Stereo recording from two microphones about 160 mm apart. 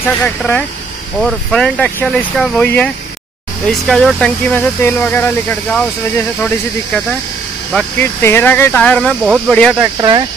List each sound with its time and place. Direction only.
0.0 s speech: 10° left (ahead or behind)
9.9 s speech: 25° right (ahead or behind)